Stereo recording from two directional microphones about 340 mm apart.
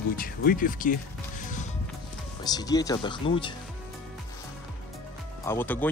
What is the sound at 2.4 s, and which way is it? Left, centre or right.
Speech, centre.